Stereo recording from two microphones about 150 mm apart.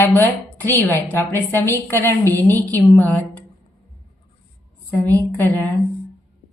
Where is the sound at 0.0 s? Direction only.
15° left (ahead or behind).